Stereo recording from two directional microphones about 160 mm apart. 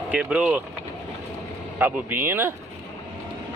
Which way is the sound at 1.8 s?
10° right (ahead or behind).